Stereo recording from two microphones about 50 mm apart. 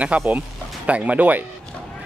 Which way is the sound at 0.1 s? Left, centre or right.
Right.